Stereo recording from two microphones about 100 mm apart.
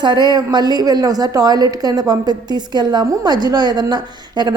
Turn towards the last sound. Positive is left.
turn(degrees=-45)  # may be behind; listen again after turning